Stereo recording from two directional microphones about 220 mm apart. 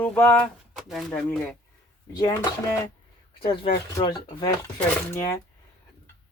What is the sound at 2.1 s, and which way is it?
Speech, 15° left (ahead or behind).